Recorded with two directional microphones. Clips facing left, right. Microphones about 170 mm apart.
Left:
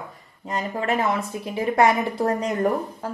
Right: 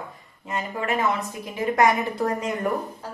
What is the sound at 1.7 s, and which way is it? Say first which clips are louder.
Speech: left 1 dB; 25° left (ahead or behind).